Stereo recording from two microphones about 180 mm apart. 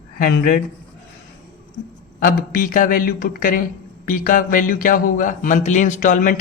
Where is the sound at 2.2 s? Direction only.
50° left (ahead or behind).